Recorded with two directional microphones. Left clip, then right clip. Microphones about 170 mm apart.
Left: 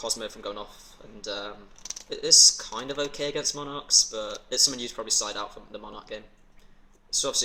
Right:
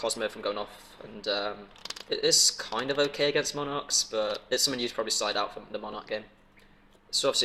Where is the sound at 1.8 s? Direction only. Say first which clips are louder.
Even; 40° right (ahead or behind).